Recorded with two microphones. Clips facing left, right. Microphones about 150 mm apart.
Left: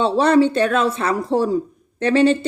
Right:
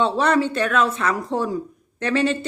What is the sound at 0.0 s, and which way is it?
Speech, 30° left (ahead or behind).